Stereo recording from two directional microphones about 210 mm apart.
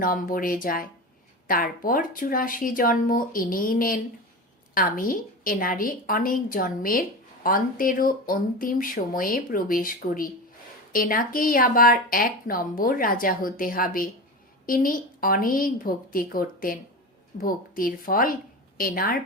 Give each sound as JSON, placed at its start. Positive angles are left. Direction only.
{"t": 0.0, "sound": "speech", "side_deg": 40}